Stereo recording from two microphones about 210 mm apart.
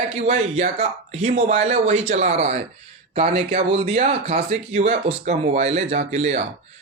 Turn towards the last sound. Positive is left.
turn(degrees=-30)  # may be behind; listen again after turning